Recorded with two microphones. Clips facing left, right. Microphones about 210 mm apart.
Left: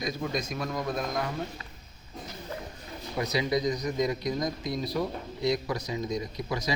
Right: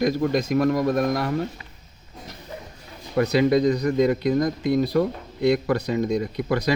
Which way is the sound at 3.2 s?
60° right (ahead or behind).